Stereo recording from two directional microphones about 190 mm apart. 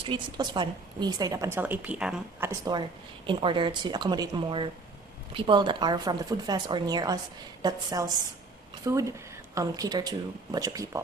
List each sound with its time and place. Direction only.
0.0 s a woman's voice: 25° right (ahead or behind); by 2.5 s 5° right (ahead or behind)
2.5 s a woman's voice: 20° right (ahead or behind)